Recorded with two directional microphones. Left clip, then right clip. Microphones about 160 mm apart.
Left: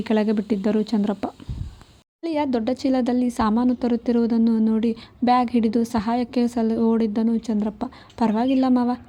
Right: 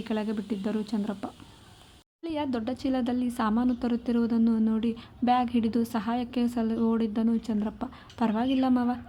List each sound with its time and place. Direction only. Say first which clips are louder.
0.0 s a woman's voice: left 10 dB; 40° left (ahead or behind)